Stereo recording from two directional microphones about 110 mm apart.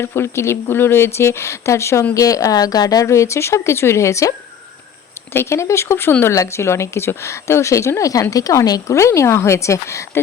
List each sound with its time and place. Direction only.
0.0 s speech: 25° left (ahead or behind)